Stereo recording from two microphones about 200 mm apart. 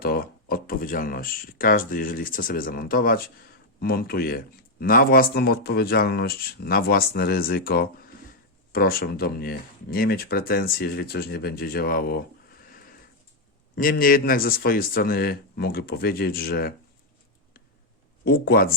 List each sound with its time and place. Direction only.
0.0 s speech: 50° left (ahead or behind)
12.7 s a sound: 45° left (ahead or behind)
13.7 s speech: 45° left (ahead or behind)
18.3 s speech: 50° left (ahead or behind)